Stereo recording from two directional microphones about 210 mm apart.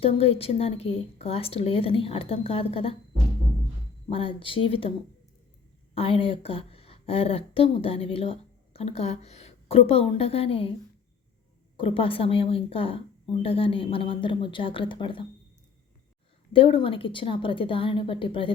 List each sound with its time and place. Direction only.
0.0 s a woman's voice: 25° left (ahead or behind)
4.1 s a woman's voice: 25° left (ahead or behind)
5.9 s a woman's voice: 25° left (ahead or behind)
11.8 s a woman's voice: 25° left (ahead or behind)
16.5 s a woman's voice: 25° left (ahead or behind)